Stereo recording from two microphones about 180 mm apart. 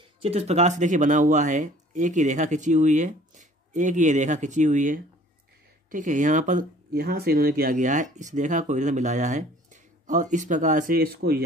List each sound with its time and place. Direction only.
0.2 s speech: 35° right (ahead or behind); by 11.4 s 60° right (ahead or behind)